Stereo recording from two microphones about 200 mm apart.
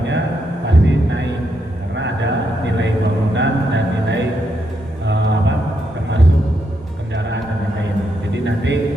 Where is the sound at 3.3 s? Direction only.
65° right (ahead or behind).